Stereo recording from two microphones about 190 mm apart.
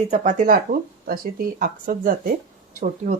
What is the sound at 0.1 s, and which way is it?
Speech, 40° right (ahead or behind).